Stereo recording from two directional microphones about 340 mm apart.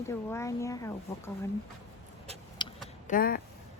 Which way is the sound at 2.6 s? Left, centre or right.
Centre.